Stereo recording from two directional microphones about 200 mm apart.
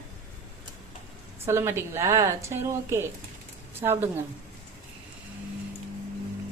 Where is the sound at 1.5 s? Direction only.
15° right (ahead or behind).